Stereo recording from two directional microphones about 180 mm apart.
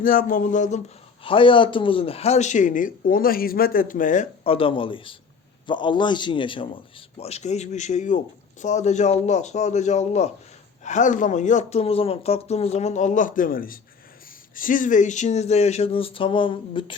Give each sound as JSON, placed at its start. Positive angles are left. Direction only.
{"t": 0.0, "sound": "a man's voice", "side_deg": 50}
{"t": 1.2, "sound": "a man's voice", "side_deg": 30}
{"t": 4.4, "sound": "a man's voice", "side_deg": 30}